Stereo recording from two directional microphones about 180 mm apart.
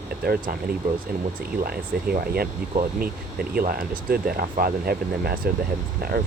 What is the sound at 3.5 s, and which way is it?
Speech, 55° right (ahead or behind).